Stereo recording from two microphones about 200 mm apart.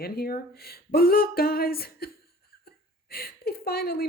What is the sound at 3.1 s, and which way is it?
Speech, 50° left (ahead or behind).